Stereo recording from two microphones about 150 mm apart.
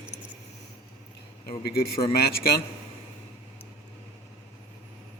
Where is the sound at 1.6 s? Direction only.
90° left.